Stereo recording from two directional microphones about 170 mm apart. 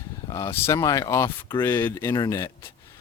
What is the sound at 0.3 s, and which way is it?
Speech, 15° left (ahead or behind).